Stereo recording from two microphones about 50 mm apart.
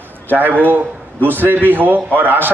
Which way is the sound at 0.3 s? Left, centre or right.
Right.